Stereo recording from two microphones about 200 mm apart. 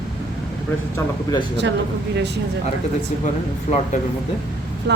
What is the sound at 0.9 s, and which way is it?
Speech, 20° left (ahead or behind).